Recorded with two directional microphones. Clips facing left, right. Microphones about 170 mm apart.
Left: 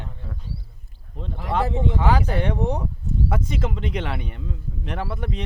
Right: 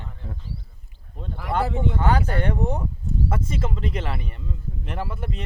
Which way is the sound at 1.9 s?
Centre (ahead or behind).